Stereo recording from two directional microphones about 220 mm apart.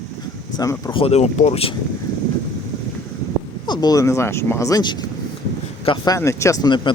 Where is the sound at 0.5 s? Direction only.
15° left (ahead or behind).